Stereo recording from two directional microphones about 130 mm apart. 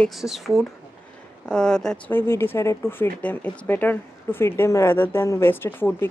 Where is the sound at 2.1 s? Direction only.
15° left (ahead or behind).